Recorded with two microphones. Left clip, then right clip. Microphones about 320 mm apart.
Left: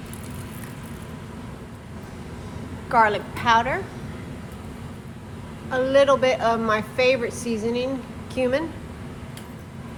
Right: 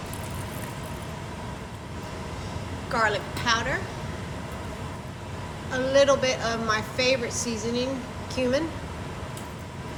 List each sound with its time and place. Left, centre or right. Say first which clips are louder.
2.9 s a woman's voice: left 6 dB; centre
5.7 s a woman's voice: left 3 dB; centre